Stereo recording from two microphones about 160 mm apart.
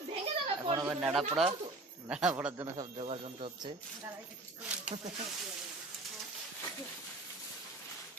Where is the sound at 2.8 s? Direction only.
35° right (ahead or behind).